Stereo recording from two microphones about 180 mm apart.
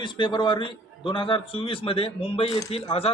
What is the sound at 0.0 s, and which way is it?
A man's voice, 25° left (ahead or behind).